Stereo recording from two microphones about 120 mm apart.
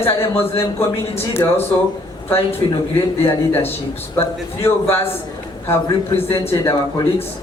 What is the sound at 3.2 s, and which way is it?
A man's voice, 20° left (ahead or behind).